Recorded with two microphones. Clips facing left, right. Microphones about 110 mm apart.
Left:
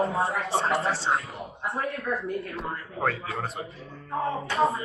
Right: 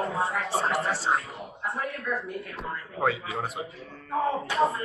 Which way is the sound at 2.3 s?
30° left (ahead or behind).